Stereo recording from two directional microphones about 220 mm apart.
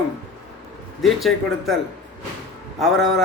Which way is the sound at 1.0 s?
Centre (ahead or behind).